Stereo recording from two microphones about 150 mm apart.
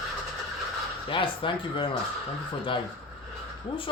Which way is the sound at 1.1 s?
35° left (ahead or behind).